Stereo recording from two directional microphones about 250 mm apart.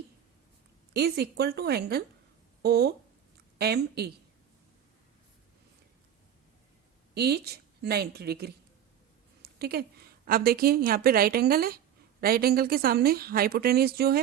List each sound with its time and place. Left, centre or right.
0.9 s a woman's voice: right
7.1 s a woman's voice: right
9.4 s a sound: right
10.2 s a woman's voice: right